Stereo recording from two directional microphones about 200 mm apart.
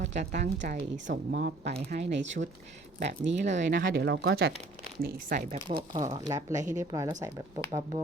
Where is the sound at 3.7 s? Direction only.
50° right (ahead or behind).